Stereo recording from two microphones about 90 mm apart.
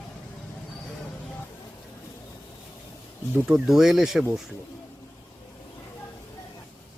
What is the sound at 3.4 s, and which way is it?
Speech, 5° right (ahead or behind).